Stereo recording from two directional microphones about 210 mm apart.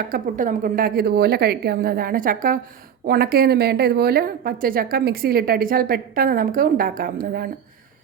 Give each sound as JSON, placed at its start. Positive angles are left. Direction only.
{"t": 0.1, "sound": "a woman's voice", "side_deg": -40}